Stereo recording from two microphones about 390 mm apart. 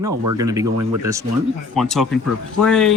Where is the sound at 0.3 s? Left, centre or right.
Centre.